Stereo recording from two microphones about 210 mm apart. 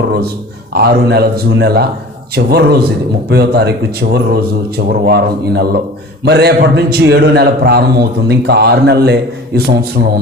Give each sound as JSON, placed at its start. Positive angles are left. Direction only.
{"t": 0.7, "sound": "a man's voice", "side_deg": -50}